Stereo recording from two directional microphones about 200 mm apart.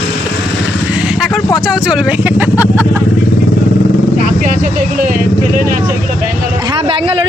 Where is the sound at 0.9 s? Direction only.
5° right (ahead or behind).